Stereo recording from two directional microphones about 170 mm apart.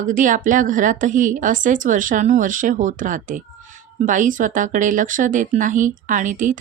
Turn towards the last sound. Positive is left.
turn(degrees=-50)  # may be behind; listen again after turning